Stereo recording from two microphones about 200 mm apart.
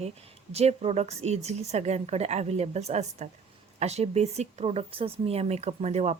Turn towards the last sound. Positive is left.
turn(degrees=-35)  # may be behind; listen again after turning